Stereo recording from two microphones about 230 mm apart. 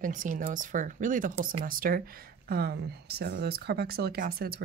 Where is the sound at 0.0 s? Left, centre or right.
Right.